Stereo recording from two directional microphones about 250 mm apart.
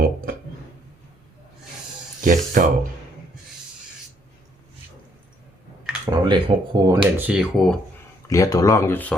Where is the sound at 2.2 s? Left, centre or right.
Right.